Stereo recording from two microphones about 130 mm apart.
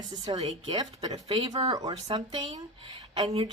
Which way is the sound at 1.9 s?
50° right (ahead or behind).